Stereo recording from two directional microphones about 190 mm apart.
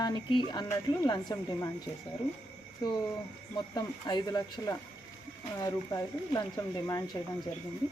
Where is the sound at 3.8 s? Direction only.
20° left (ahead or behind).